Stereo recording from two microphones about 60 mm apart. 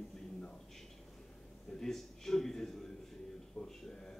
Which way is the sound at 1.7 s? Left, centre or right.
Centre.